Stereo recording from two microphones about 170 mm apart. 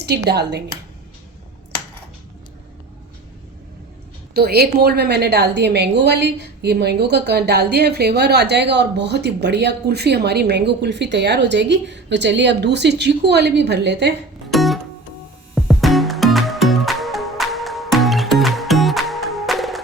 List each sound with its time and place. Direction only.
0.0 s a woman's voice: 75° right (ahead or behind)
4.4 s a woman's voice: 65° right (ahead or behind); by 14.1 s 85° right
14.5 s music: centre (ahead or behind)